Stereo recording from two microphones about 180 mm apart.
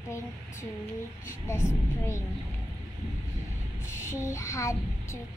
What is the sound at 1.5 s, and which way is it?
Speech, 15° left (ahead or behind).